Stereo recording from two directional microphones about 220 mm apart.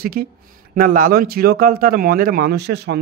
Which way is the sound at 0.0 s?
40° right (ahead or behind).